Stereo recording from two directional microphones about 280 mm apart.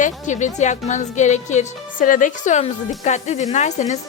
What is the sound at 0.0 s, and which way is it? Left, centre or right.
A woman's voice, left.